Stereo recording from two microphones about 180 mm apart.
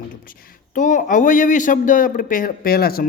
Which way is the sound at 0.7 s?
45° left (ahead or behind).